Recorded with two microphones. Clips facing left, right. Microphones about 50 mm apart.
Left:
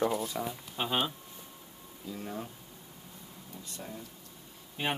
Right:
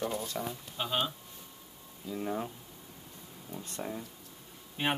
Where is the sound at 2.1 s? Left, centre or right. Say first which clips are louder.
Right 5 dB; centre.